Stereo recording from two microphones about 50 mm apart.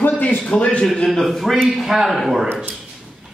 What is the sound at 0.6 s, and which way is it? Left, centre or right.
Speech, left.